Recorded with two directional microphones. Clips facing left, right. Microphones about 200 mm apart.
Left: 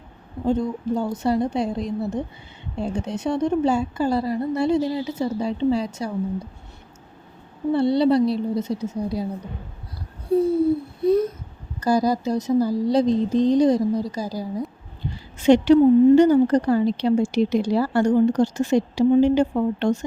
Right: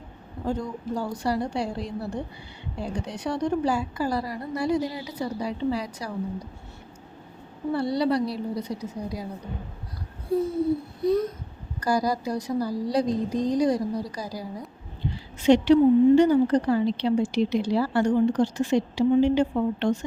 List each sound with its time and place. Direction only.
0.4 s a woman's voice: 25° left (ahead or behind)
7.7 s a woman's voice: 25° left (ahead or behind)
11.0 s a woman's voice: 25° left (ahead or behind)
15.4 s a woman's voice: 50° left (ahead or behind)